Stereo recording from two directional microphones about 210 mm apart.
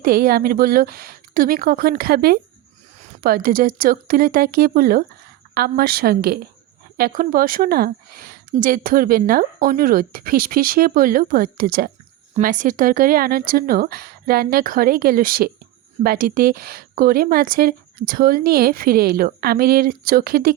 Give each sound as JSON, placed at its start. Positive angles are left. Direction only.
{"t": 0.0, "sound": "a woman's voice", "side_deg": -45}